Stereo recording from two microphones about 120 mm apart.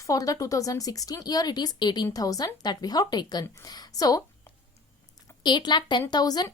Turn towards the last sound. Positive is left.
turn(degrees=35)  # may be behind; listen again after turning